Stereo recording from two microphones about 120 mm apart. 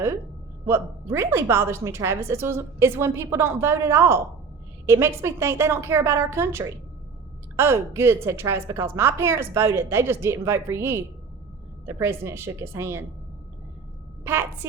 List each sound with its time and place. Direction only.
0.7 s a woman's voice: 20° right (ahead or behind)